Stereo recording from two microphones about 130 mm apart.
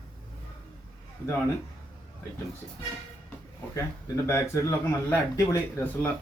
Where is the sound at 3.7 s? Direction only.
20° left (ahead or behind).